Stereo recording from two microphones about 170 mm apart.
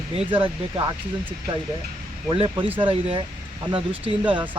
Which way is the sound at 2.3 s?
35° right (ahead or behind).